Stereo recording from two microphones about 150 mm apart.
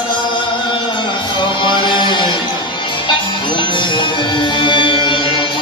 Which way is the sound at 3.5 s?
35° left (ahead or behind).